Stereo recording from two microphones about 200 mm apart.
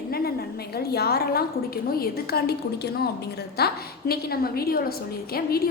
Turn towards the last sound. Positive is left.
turn(degrees=50)  # may be behind; listen again after turning